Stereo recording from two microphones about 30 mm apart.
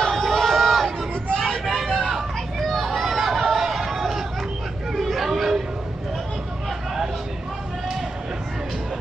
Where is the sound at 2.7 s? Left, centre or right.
Centre.